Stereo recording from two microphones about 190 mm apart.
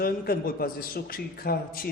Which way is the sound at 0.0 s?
50° left (ahead or behind).